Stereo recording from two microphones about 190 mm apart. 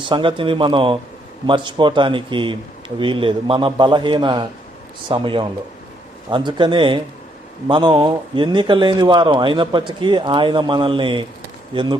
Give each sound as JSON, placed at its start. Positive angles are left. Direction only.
{"t": 0.1, "sound": "a man's voice", "side_deg": -25}